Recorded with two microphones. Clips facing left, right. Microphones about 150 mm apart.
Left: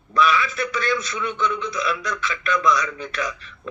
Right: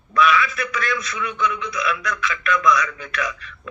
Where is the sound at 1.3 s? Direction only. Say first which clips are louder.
Even; centre (ahead or behind).